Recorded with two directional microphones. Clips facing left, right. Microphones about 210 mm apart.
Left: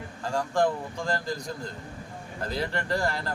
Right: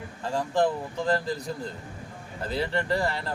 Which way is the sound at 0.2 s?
5° right (ahead or behind).